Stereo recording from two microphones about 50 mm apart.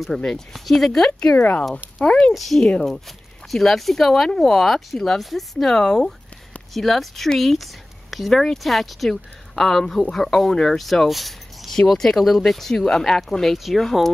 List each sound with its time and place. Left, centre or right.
0.1 s speech: centre
2.3 s speech: centre